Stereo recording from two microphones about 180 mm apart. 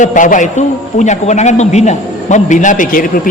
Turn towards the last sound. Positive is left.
turn(degrees=50)  # may be behind; listen again after turning